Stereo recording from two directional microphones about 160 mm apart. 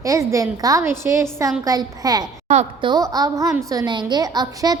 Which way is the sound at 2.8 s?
25° right (ahead or behind).